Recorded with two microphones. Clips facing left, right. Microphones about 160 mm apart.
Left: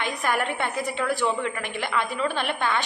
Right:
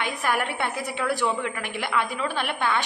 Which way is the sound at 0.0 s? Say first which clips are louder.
Even; 10° right (ahead or behind).